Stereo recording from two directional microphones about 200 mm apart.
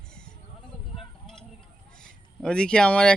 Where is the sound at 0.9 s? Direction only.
Centre (ahead or behind).